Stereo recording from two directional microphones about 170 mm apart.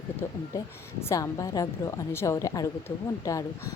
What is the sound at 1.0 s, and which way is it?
A woman's voice, 20° left (ahead or behind).